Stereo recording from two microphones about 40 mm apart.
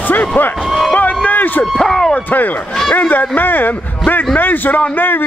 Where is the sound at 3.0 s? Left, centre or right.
Left.